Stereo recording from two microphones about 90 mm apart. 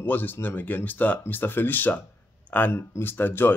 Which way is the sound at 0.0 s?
20° left (ahead or behind).